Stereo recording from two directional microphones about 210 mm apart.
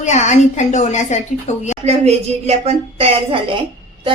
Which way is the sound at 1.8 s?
30° right (ahead or behind).